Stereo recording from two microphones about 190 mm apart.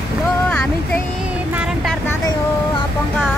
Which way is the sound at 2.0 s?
20° left (ahead or behind).